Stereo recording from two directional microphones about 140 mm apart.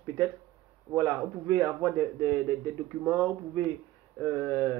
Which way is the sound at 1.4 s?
15° left (ahead or behind).